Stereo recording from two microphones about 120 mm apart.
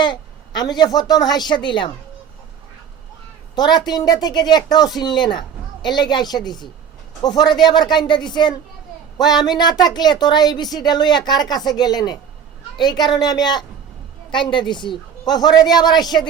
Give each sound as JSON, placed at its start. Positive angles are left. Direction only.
{"t": 0.0, "sound": "a woman's voice", "side_deg": 35}
{"t": 3.5, "sound": "a woman's voice", "side_deg": 35}
{"t": 14.7, "sound": "a woman's voice", "side_deg": 40}